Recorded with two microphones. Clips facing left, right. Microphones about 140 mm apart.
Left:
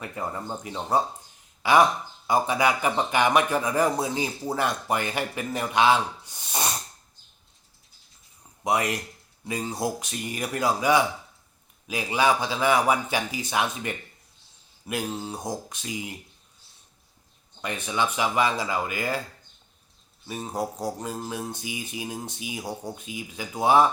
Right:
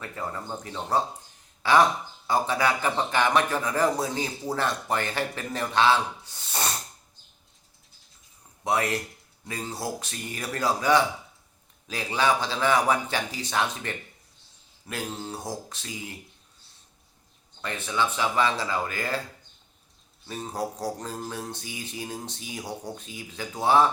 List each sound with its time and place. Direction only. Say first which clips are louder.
0.0 s speech: left 2 dB; 15° left (ahead or behind)
8.6 s speech: left 1 dB; 15° left (ahead or behind)
17.6 s speech: left 1 dB; 15° left (ahead or behind)
20.2 s speech: left 1 dB; 10° left (ahead or behind)